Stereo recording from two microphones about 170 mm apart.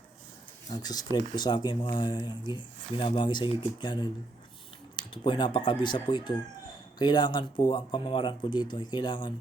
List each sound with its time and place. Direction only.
0.7 s speech: 25° left (ahead or behind)